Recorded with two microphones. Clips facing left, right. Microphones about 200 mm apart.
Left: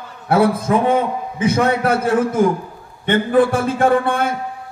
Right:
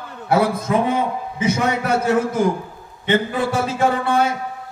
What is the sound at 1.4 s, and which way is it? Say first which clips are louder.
A man's voice: left 4 dB; 55° left (ahead or behind).